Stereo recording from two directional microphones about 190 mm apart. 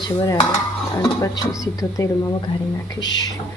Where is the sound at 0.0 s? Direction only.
20° left (ahead or behind).